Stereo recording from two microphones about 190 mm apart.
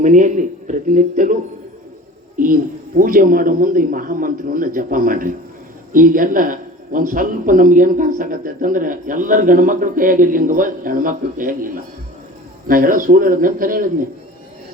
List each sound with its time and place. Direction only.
0.0 s speech: 40° right (ahead or behind)